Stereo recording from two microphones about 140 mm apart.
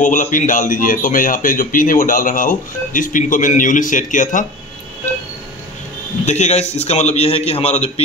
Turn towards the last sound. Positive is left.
turn(degrees=50)  # may be behind; listen again after turning